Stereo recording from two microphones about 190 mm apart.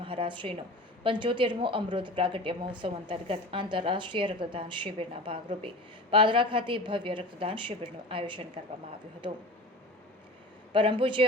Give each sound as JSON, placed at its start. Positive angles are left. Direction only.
{"t": 0.0, "sound": "a woman's voice", "side_deg": -30}
{"t": 10.7, "sound": "a woman's voice", "side_deg": -25}